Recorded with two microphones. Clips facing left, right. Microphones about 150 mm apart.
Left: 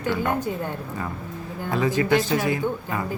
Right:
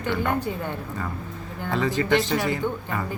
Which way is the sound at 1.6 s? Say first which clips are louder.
Left 1 dB; 15° left (ahead or behind).